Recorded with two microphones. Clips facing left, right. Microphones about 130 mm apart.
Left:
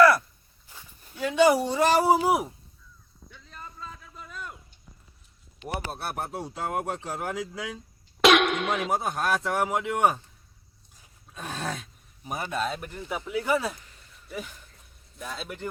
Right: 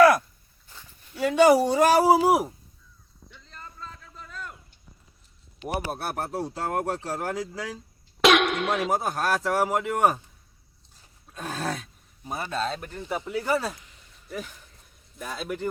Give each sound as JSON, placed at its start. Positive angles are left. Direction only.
{"t": 1.2, "sound": "speech", "side_deg": -45}
{"t": 1.5, "sound": "speech", "side_deg": -5}
{"t": 3.3, "sound": "a sound", "side_deg": 5}
{"t": 5.6, "sound": "speech", "side_deg": -10}
{"t": 11.3, "sound": "speech", "side_deg": 0}
{"t": 12.2, "sound": "speech", "side_deg": 15}